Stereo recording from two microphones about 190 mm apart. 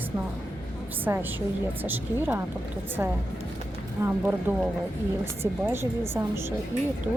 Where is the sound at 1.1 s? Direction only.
15° right (ahead or behind).